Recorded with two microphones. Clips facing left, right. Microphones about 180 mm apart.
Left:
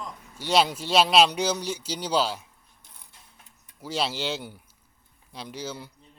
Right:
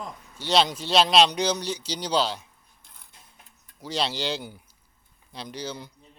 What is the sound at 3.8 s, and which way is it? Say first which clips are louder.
Speech: even; 5° left (ahead or behind).